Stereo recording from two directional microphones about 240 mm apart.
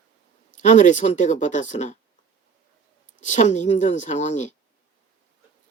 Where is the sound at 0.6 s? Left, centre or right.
Left.